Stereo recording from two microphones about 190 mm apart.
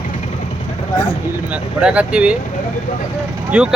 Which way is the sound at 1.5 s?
5° right (ahead or behind).